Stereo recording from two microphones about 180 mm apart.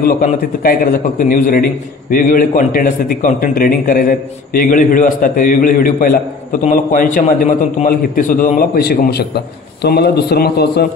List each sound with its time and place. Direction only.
0.0 s a man's voice: 50° left (ahead or behind)